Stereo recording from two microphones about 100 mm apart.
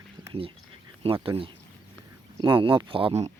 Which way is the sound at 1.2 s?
65° right (ahead or behind).